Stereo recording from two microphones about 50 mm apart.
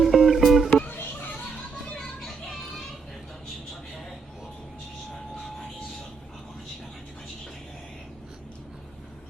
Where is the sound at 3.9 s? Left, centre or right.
Centre.